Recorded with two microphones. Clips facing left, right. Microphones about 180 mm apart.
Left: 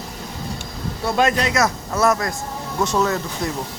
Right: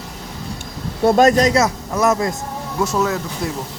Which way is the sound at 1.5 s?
20° right (ahead or behind).